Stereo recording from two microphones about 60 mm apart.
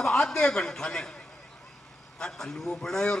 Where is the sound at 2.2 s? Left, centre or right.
Centre.